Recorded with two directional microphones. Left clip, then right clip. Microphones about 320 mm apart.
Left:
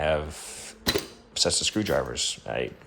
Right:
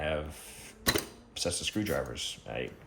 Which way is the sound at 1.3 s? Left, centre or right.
Centre.